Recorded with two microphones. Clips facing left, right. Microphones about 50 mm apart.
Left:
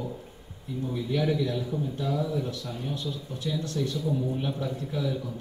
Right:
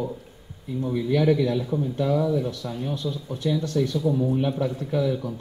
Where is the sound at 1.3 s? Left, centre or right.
Right.